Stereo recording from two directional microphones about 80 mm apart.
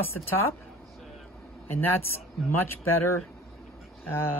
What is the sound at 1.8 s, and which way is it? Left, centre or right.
Speech, left.